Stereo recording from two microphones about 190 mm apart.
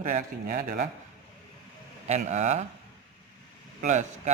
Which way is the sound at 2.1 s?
40° right (ahead or behind).